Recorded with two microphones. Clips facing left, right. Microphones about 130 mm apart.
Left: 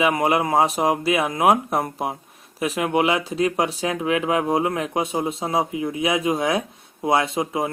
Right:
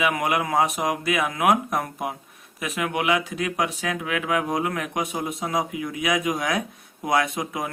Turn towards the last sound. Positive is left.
turn(degrees=25)  # may be behind; listen again after turning